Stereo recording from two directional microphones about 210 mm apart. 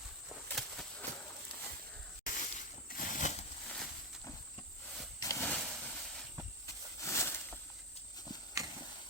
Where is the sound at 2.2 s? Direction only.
40° left (ahead or behind).